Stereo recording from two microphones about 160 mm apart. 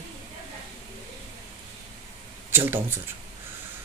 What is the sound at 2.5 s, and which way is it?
Speech, 15° right (ahead or behind).